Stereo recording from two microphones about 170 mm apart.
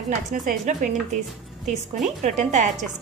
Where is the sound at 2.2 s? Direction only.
45° right (ahead or behind).